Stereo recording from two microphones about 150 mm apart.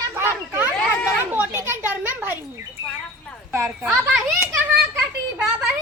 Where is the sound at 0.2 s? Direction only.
15° right (ahead or behind).